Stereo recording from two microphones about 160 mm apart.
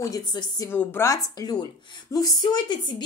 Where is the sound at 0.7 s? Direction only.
15° left (ahead or behind).